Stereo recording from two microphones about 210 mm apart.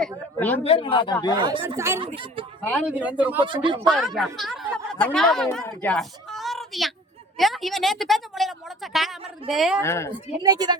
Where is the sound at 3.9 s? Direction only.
Centre (ahead or behind).